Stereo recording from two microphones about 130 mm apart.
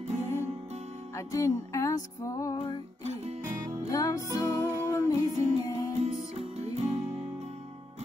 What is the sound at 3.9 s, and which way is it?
Music, 25° left (ahead or behind).